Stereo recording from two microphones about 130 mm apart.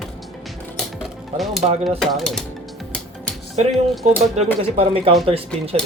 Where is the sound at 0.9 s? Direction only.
Centre (ahead or behind).